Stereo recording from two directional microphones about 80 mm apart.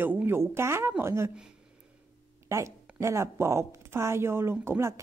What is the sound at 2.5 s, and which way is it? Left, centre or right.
Speech, right.